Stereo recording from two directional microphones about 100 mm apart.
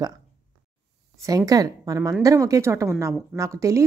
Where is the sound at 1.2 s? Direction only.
35° right (ahead or behind).